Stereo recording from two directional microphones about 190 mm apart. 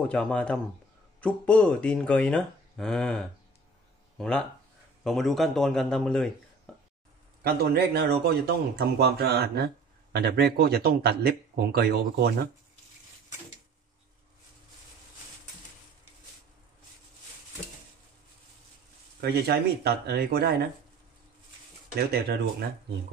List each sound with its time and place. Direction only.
0.0 s speech: 5° left (ahead or behind)
7.4 s speech: 55° right (ahead or behind)
19.2 s speech: 55° right (ahead or behind)
21.9 s speech: 55° right (ahead or behind)